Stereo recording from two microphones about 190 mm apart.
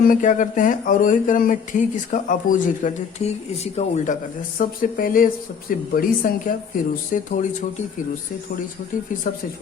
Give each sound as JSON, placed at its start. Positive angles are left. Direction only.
{"t": 0.1, "sound": "speech", "side_deg": 40}
{"t": 9.2, "sound": "speech", "side_deg": 45}